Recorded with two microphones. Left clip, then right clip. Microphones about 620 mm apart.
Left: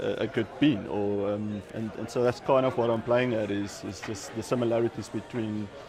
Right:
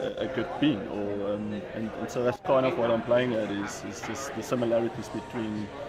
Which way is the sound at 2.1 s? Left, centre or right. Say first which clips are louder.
Left 1 dB; left.